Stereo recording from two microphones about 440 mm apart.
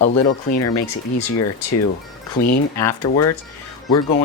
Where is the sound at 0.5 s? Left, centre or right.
Left.